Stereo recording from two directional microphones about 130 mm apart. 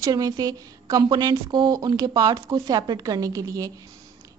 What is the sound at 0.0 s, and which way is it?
A woman's voice, 30° right (ahead or behind).